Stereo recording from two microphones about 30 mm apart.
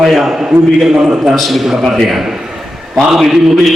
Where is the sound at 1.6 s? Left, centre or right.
Centre.